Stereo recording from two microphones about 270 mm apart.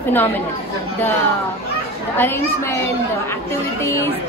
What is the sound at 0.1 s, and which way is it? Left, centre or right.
Speech, centre.